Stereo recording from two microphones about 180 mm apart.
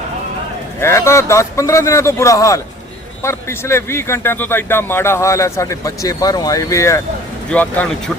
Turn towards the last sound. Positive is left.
turn(degrees=10)  # may be behind; listen again after turning